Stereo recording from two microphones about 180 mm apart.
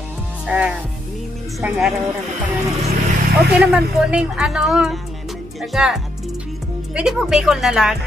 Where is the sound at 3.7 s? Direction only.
5° right (ahead or behind).